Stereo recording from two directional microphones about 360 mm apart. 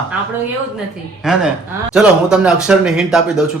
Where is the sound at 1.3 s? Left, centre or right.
Centre.